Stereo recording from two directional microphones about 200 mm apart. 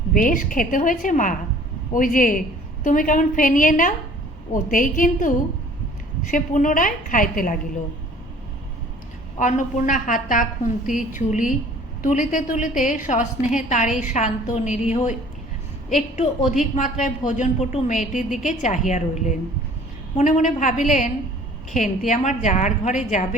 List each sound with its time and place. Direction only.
0.1 s a woman's voice: 40° left (ahead or behind)
6.3 s a woman's voice: 40° left (ahead or behind)
9.4 s a woman's voice: 40° left (ahead or behind)
16.7 s a woman's voice: 40° left (ahead or behind)